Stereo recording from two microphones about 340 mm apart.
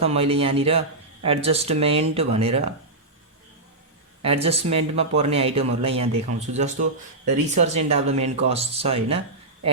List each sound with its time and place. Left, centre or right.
0.0 s speech: centre
4.2 s speech: centre